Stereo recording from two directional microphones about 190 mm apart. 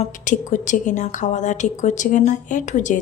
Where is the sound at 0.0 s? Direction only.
40° left (ahead or behind).